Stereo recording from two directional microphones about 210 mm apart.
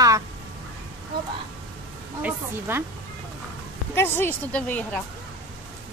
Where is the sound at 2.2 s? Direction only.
10° right (ahead or behind).